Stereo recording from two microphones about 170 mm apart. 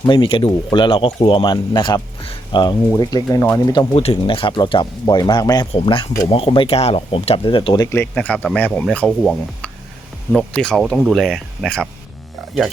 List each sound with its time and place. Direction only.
0.0 s speech: 30° left (ahead or behind)
8.1 s speech: 10° left (ahead or behind)